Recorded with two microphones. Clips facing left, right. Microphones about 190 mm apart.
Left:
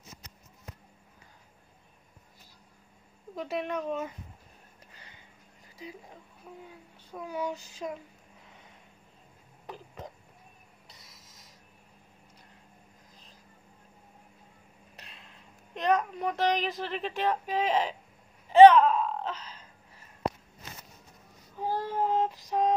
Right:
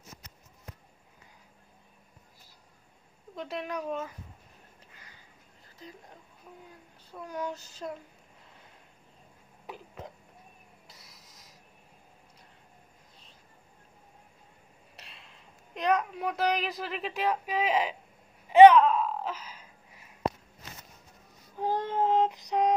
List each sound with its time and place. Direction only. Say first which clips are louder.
3.3 s speech: left 3 dB; centre (ahead or behind)
4.9 s a sound: left 1 dB; 25° left (ahead or behind)
7.2 s child singing: left 2 dB; 10° left (ahead or behind)
9.7 s speech: even; centre (ahead or behind)
10.9 s a sound: right 1 dB; centre (ahead or behind)
15.0 s speech: left 1 dB; centre (ahead or behind)
18.8 s wail: even; centre (ahead or behind)
21.6 s child singing: right 2 dB; 20° right (ahead or behind)